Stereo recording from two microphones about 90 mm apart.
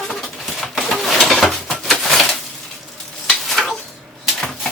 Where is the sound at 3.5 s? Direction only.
Centre (ahead or behind).